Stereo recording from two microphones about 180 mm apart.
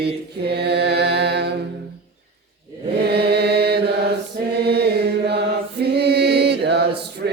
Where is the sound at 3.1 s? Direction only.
65° right (ahead or behind).